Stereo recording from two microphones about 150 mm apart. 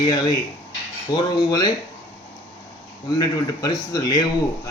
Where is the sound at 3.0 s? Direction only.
30° left (ahead or behind).